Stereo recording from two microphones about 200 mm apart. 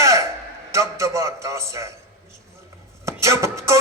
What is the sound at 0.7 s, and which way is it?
A man's voice, 15° right (ahead or behind).